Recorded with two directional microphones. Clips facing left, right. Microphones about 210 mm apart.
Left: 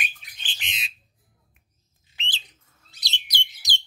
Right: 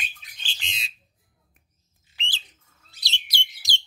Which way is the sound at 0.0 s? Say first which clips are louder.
Left 3 dB; 20° left (ahead or behind).